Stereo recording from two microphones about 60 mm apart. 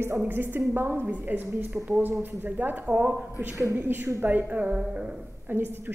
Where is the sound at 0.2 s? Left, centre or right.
Right.